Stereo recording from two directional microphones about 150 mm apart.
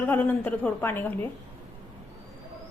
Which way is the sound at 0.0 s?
15° left (ahead or behind).